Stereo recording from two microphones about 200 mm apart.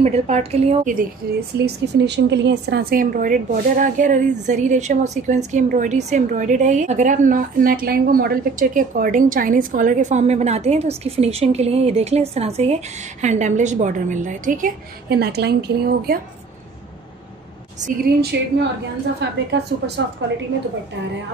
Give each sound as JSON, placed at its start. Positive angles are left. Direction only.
{"t": 0.0, "sound": "speech", "side_deg": -30}
{"t": 1.2, "sound": "speech", "side_deg": -50}
{"t": 2.0, "sound": "speech", "side_deg": -60}
{"t": 17.7, "sound": "speech", "side_deg": -40}
{"t": 18.3, "sound": "a woman's voice", "side_deg": -55}